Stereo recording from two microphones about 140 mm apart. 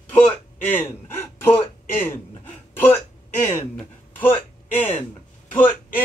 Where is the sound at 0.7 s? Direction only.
15° left (ahead or behind).